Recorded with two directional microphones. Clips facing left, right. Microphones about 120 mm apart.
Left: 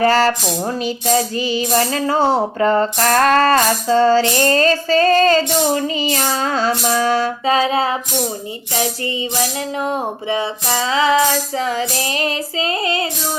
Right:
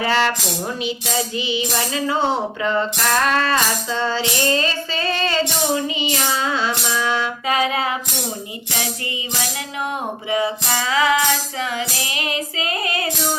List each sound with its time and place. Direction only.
0.0 s music: 40° left (ahead or behind)
1.4 s music: 40° left (ahead or behind)
10.2 s music: 30° left (ahead or behind)